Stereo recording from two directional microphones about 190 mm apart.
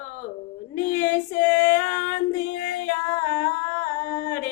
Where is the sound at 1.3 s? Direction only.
45° left (ahead or behind).